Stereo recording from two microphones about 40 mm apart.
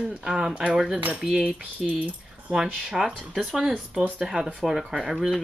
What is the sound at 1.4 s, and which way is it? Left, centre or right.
Speech, right.